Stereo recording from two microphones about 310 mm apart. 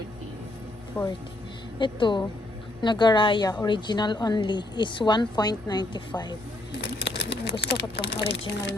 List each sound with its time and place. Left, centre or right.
0.9 s speech: centre
1.8 s a woman's voice: centre
6.8 s a sound: left
7.6 s speech: left